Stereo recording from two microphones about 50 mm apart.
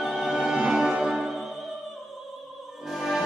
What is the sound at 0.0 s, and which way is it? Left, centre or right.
Music, centre.